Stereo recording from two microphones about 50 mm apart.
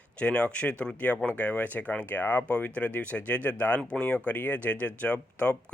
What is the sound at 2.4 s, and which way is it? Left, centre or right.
Speech, left.